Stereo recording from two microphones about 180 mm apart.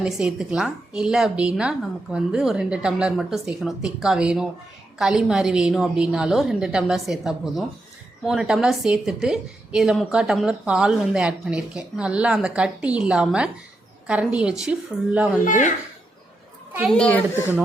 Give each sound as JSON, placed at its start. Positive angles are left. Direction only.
{"t": 0.0, "sound": "a woman's voice", "side_deg": -5}
{"t": 15.4, "sound": "a child's voice", "side_deg": 45}
{"t": 16.9, "sound": "a child's voice", "side_deg": 5}